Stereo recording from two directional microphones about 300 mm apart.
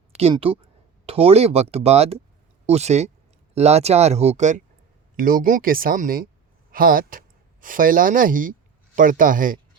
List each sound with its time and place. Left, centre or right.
0.2 s speech: centre